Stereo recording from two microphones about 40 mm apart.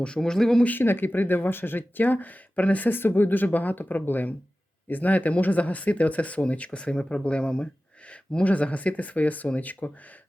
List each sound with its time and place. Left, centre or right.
0.2 s speech: centre
0.8 s speech: left
2.9 s speech: left
6.9 s speech: left